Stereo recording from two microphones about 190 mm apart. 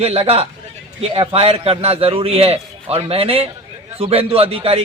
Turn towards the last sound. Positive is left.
turn(degrees=-30)  # may be behind; listen again after turning